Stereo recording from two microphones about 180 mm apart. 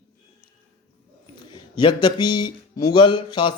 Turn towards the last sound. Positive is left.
turn(degrees=25)  # may be behind; listen again after turning